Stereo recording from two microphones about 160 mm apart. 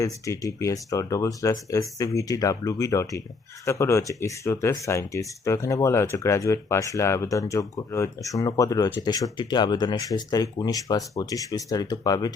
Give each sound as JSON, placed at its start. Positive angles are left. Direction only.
{"t": 0.0, "sound": "speech", "side_deg": 20}